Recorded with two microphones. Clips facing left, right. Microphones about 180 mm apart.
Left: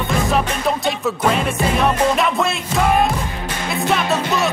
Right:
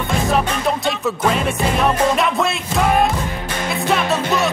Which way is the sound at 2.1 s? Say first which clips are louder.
Even; centre (ahead or behind).